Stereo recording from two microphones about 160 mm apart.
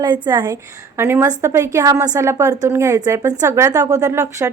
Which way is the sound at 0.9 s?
15° right (ahead or behind).